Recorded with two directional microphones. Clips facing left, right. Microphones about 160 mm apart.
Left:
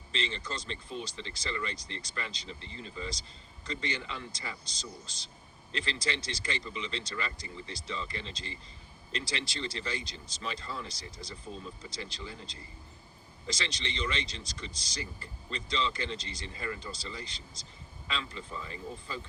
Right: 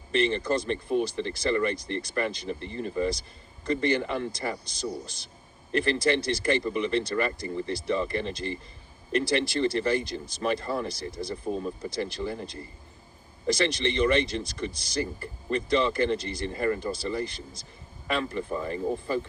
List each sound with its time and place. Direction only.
0.1 s speech: 55° right (ahead or behind)